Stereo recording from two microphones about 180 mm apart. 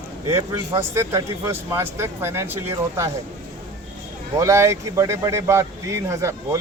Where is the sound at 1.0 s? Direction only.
15° right (ahead or behind).